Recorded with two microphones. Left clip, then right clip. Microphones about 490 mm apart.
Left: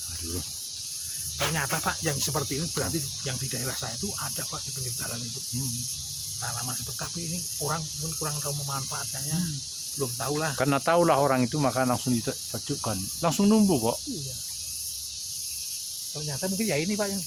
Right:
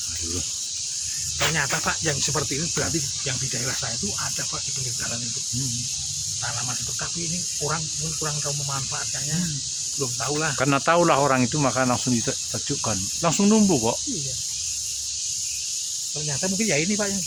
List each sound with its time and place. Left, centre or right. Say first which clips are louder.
1.4 s speech: right 5 dB; left
10.0 s speech: right 3 dB; left
10.6 s speech: right 3 dB; left
16.4 s speech: right 4 dB; left